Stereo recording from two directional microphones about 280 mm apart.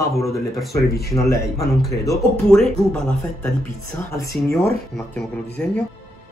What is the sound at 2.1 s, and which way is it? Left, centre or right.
A man's voice, centre.